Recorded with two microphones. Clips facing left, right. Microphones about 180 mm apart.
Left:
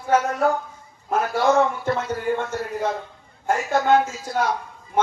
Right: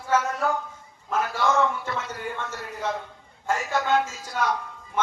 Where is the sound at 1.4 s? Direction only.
35° left (ahead or behind).